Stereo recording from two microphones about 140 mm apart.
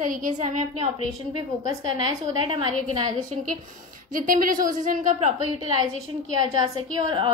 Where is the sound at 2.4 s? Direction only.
35° right (ahead or behind).